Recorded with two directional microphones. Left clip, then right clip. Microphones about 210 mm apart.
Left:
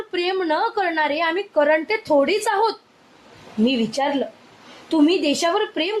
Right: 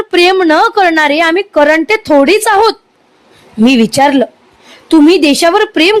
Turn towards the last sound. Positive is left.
turn(degrees=-50)  # may be behind; listen again after turning